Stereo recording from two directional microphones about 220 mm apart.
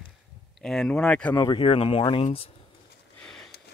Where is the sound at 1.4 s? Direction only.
20° left (ahead or behind).